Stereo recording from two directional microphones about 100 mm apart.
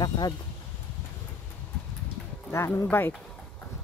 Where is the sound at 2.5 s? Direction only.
30° left (ahead or behind).